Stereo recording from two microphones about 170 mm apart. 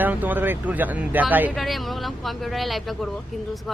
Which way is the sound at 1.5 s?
Centre (ahead or behind).